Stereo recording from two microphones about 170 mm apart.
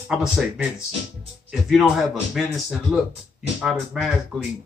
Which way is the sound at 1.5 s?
Centre (ahead or behind).